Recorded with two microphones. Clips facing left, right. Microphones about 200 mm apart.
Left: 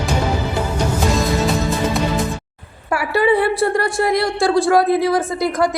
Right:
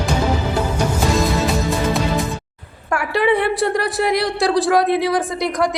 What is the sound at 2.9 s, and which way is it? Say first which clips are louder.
A woman's voice: left 1 dB; 5° left (ahead or behind).